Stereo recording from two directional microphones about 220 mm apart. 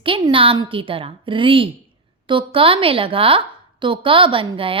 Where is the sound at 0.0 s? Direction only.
25° right (ahead or behind).